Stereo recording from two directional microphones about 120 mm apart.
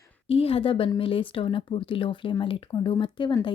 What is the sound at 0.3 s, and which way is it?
A woman's voice, 55° left (ahead or behind).